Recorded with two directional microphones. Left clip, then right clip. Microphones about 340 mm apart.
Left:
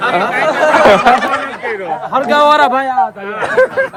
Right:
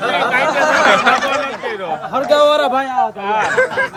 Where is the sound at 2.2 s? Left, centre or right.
Centre.